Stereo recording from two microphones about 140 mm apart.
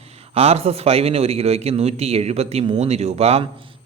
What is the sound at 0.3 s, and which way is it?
A man's voice, 45° right (ahead or behind).